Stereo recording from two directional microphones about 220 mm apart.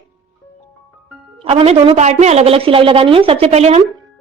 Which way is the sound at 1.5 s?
25° right (ahead or behind).